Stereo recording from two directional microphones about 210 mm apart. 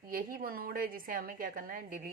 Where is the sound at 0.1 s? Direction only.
40° right (ahead or behind).